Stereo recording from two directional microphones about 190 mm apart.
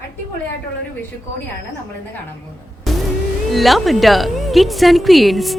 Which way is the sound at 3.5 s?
Centre (ahead or behind).